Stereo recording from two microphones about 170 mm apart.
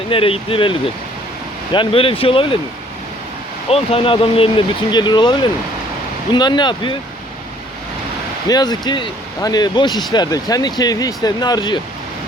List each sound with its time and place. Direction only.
0.1 s speech: 30° left (ahead or behind)
3.7 s speech: 35° left (ahead or behind)
8.4 s speech: 25° left (ahead or behind)